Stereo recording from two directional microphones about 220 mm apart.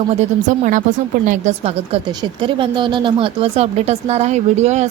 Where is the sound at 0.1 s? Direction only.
30° right (ahead or behind).